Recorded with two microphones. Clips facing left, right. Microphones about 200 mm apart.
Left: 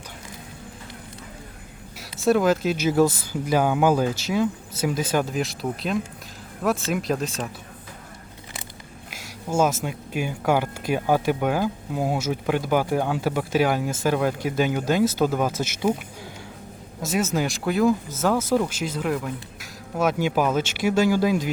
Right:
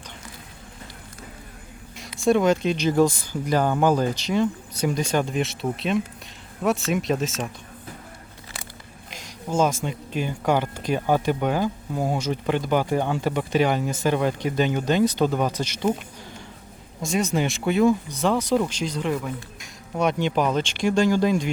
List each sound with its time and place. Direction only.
2.0 s speech: 5° left (ahead or behind)
9.0 s a sound: 5° left (ahead or behind)
9.8 s speech: 10° left (ahead or behind)
17.0 s speech: 5° left (ahead or behind)